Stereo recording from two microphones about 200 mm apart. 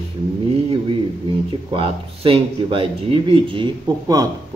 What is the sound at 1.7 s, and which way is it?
Speech, 25° right (ahead or behind).